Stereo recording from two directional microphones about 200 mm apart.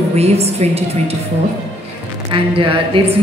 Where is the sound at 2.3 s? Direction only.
25° right (ahead or behind).